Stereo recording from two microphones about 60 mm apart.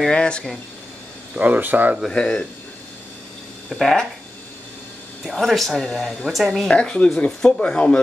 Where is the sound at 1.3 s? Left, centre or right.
Right.